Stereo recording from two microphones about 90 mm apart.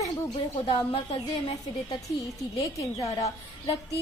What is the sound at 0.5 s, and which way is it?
Speech, 80° left.